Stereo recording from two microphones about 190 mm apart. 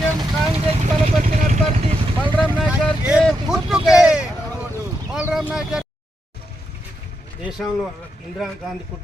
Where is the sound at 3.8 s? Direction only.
5° right (ahead or behind).